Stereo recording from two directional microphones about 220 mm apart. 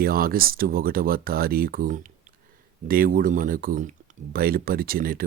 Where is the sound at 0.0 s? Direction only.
40° right (ahead or behind).